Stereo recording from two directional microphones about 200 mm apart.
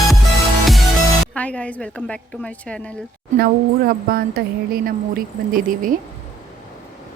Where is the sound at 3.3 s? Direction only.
50° right (ahead or behind).